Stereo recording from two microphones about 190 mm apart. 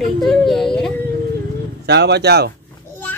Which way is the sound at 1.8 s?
60° right (ahead or behind).